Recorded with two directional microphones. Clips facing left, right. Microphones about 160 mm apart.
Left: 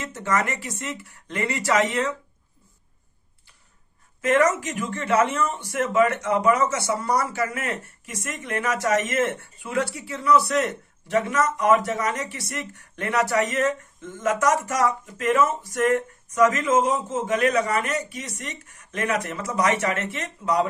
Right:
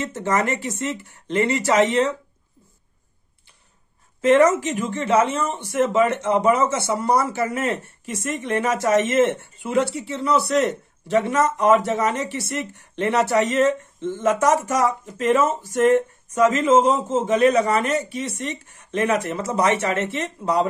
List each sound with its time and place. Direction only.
0.0 s speech: 30° right (ahead or behind)
4.2 s speech: 30° right (ahead or behind)